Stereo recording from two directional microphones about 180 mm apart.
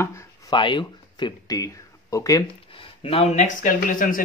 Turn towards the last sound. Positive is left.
turn(degrees=50)  # may be behind; listen again after turning